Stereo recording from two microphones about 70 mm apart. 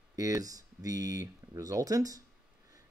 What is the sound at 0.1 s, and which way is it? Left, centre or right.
Speech, right.